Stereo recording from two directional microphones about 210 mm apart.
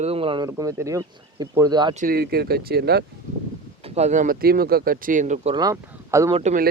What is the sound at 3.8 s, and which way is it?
Speech, 30° right (ahead or behind).